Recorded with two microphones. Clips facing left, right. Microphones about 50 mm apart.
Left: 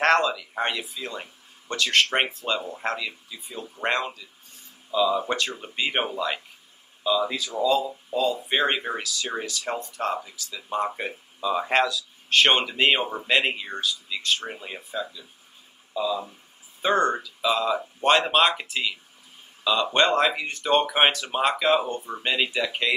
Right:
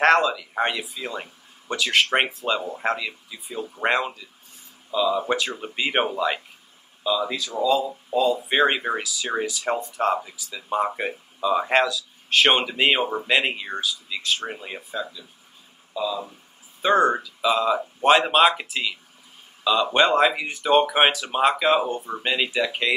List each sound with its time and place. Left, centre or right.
0.0 s speech: centre
7.0 s speech: centre
9.3 s speech: centre
15.9 s speech: centre
16.8 s speech: centre